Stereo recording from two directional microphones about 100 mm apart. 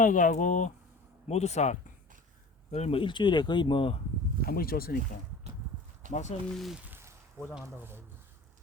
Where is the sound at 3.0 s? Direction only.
50° left (ahead or behind).